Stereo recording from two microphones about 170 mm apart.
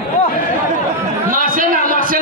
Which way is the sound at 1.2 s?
55° right (ahead or behind).